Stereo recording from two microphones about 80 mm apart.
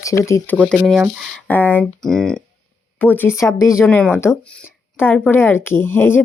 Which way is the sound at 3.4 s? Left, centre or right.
Left.